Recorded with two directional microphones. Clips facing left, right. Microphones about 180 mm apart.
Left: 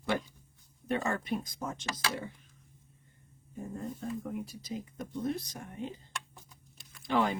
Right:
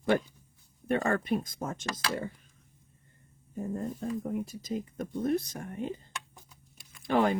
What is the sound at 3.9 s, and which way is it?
Speech, 45° right (ahead or behind).